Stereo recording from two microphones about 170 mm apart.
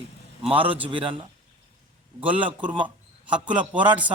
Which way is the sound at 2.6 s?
30° right (ahead or behind).